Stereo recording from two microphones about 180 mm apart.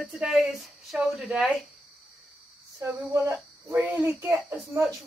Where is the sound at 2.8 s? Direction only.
15° right (ahead or behind).